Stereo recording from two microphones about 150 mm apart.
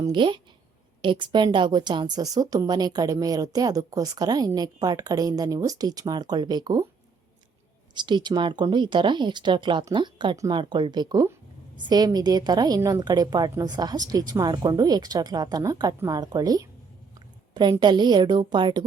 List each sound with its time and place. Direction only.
0.0 s a woman's voice: 30° right (ahead or behind)
7.9 s a woman's voice: 30° right (ahead or behind)
10.6 s a woman's voice: 30° right (ahead or behind)